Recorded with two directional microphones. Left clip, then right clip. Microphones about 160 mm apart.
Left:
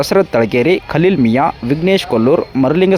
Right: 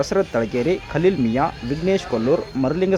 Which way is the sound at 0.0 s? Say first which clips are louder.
Left 8 dB; 40° left (ahead or behind).